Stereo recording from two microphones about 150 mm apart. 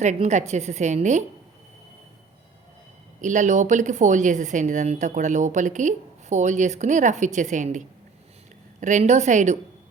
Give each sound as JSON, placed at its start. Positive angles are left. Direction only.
{"t": 0.0, "sound": "speech", "side_deg": -50}
{"t": 3.2, "sound": "speech", "side_deg": -55}